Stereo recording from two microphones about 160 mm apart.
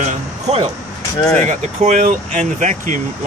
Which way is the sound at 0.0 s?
45° right (ahead or behind).